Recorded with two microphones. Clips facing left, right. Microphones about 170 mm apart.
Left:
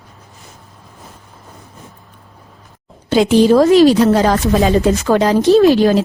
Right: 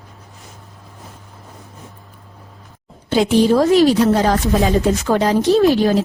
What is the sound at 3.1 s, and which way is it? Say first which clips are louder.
Speech: left 3 dB; 90° left.